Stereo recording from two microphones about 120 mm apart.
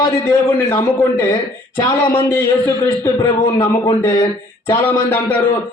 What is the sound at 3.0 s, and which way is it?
Speech, 20° left (ahead or behind).